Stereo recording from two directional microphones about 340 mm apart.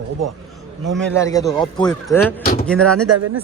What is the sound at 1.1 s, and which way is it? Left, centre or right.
A man's voice, centre.